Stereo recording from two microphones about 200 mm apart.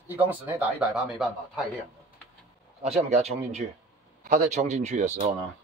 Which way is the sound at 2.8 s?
35° right (ahead or behind).